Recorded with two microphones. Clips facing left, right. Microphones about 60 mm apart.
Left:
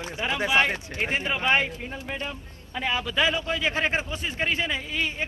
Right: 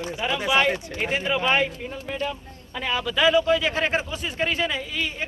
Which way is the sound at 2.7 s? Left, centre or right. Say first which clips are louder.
Right 1 dB; centre.